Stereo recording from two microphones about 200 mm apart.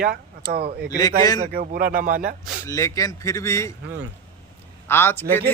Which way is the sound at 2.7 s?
15° left (ahead or behind).